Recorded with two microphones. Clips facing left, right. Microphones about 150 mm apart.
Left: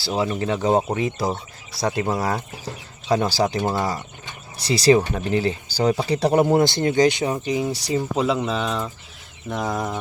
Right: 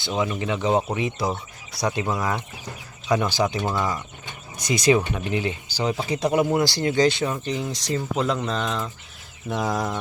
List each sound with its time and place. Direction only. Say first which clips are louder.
0.0 s speech: left 2 dB; 35° left (ahead or behind)
6.7 s speech: left 2 dB; 20° left (ahead or behind); by 10.0 s 5° left (ahead or behind)